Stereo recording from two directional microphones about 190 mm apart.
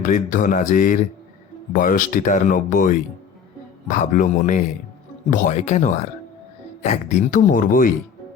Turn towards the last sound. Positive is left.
turn(degrees=45)  # may be behind; listen again after turning